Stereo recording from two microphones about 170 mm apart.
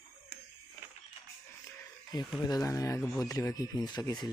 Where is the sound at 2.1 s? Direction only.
25° left (ahead or behind).